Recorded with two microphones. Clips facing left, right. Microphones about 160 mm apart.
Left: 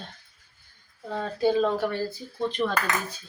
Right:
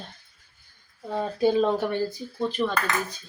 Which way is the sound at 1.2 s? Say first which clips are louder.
Right 1 dB; 20° right (ahead or behind).